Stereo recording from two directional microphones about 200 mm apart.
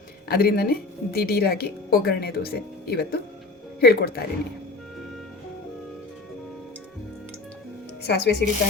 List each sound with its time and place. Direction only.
0.3 s speech: 50° left (ahead or behind)
8.0 s speech: 55° left (ahead or behind)